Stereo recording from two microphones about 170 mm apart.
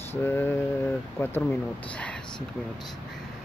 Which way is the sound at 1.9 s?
5° left (ahead or behind).